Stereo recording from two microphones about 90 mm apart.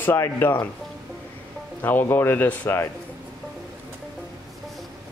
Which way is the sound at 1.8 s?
20° left (ahead or behind).